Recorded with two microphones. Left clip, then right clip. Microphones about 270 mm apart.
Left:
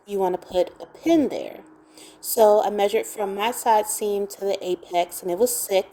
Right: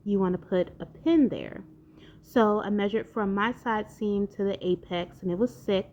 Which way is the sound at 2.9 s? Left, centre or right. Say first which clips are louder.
Left 5 dB; left.